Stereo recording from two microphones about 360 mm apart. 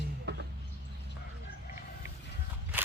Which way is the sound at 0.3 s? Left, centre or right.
Right.